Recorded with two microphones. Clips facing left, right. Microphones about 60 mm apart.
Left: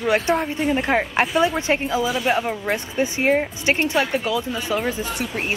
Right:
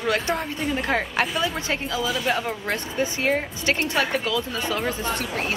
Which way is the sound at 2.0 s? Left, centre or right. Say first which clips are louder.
Left 1 dB; centre.